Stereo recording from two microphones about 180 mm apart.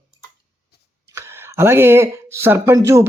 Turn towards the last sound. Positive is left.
turn(degrees=-15)  # may be behind; listen again after turning